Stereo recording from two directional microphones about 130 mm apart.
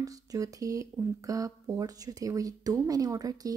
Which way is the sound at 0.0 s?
25° right (ahead or behind).